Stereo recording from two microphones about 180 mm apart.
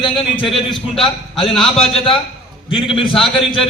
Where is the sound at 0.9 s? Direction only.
30° left (ahead or behind).